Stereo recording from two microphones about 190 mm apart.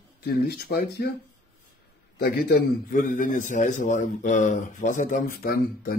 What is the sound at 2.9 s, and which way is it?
A man's voice, 45° left (ahead or behind).